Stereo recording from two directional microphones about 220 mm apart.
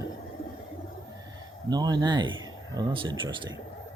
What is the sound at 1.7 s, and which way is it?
Speech, 20° right (ahead or behind).